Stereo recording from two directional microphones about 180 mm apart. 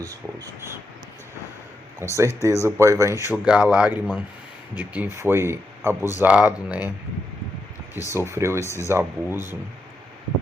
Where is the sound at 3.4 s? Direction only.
5° right (ahead or behind).